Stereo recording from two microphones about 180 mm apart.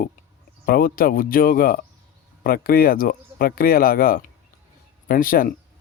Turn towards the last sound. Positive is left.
turn(degrees=50)  # may be behind; listen again after turning